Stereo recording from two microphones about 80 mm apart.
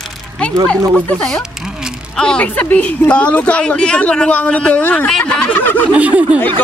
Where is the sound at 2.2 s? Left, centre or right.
Centre.